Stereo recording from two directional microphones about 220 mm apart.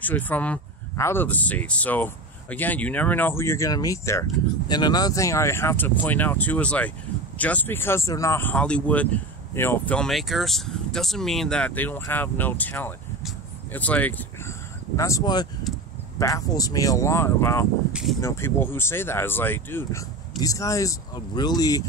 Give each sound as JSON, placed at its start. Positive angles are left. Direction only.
{"t": 0.0, "sound": "speech", "side_deg": 5}
{"t": 17.9, "sound": "speech", "side_deg": 0}
{"t": 18.2, "sound": "speech", "side_deg": 10}